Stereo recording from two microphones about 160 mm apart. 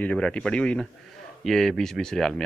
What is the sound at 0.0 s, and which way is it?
Speech, 5° left (ahead or behind).